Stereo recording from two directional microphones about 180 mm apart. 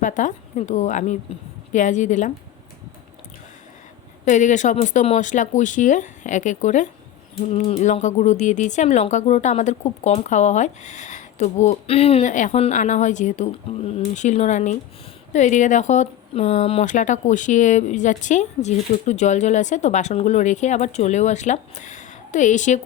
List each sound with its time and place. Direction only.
0.0 s speech: 45° left (ahead or behind)
4.3 s speech: 45° left (ahead or behind)